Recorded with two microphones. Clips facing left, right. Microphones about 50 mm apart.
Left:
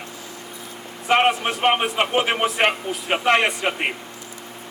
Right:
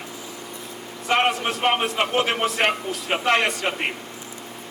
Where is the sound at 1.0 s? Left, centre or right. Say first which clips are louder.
Left 3 dB; centre.